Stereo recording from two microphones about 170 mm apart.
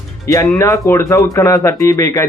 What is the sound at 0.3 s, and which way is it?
A man's voice, 20° left (ahead or behind).